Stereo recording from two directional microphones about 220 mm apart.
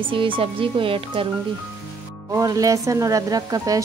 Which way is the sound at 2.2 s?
15° right (ahead or behind).